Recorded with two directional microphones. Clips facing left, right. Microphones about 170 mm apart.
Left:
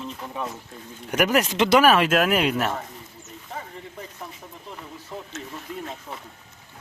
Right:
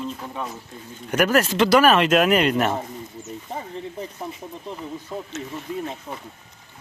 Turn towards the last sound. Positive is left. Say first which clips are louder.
# right 4 dB
turn(degrees=0)  # may be behind; listen again after turning